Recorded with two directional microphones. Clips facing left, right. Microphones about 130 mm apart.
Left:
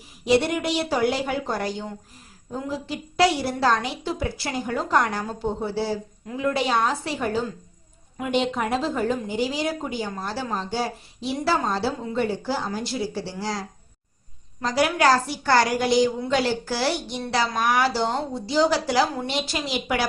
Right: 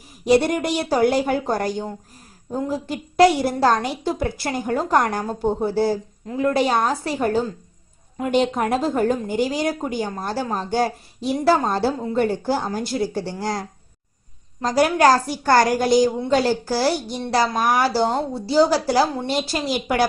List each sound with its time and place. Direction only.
0.3 s a woman's voice: 45° right (ahead or behind)